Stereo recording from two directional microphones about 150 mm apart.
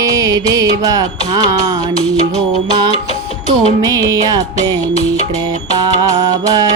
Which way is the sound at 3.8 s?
25° right (ahead or behind).